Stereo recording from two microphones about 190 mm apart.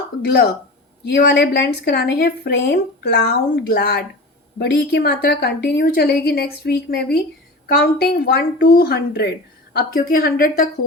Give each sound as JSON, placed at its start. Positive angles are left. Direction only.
{"t": 0.3, "sound": "a woman's voice", "side_deg": 60}